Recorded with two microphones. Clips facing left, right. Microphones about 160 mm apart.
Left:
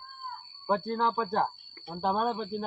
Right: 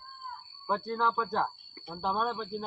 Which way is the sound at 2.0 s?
45° left (ahead or behind).